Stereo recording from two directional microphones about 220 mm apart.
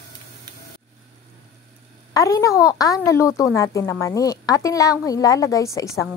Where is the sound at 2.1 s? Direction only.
15° left (ahead or behind).